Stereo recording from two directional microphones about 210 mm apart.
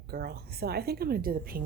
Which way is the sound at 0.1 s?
50° right (ahead or behind).